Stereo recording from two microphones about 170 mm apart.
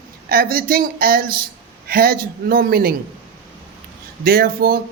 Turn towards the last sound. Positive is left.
turn(degrees=-60)  # may be behind; listen again after turning